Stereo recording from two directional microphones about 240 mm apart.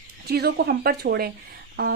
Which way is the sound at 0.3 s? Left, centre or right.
Right.